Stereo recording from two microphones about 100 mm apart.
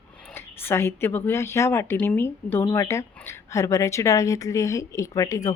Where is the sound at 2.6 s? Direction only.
35° left (ahead or behind).